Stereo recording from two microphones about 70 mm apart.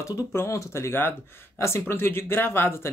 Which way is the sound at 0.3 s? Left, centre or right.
Left.